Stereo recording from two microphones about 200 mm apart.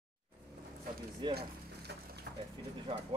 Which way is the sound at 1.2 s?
25° right (ahead or behind).